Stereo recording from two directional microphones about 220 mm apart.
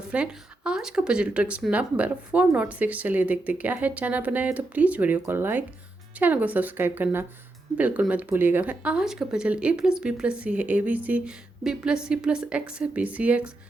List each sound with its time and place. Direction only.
0.1 s speech: 5° right (ahead or behind)